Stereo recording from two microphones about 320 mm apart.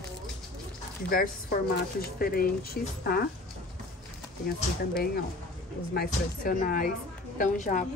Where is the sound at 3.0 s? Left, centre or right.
Left.